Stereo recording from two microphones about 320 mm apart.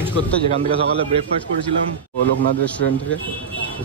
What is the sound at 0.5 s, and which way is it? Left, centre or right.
Speech, centre.